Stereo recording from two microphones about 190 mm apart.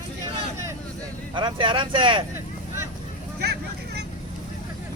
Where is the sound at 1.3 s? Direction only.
25° right (ahead or behind).